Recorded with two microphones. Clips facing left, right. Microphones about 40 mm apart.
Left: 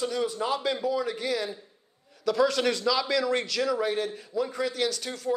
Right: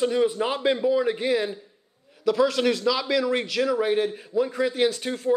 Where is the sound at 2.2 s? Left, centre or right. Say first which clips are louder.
Right 3 dB; centre.